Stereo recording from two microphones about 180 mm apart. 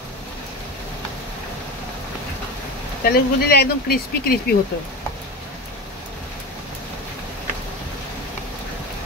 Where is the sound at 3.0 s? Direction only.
60° left (ahead or behind).